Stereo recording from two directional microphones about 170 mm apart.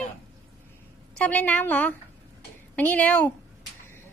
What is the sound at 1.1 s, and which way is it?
A woman's voice, 5° left (ahead or behind).